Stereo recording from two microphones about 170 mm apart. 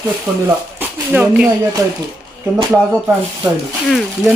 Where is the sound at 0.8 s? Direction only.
10° right (ahead or behind).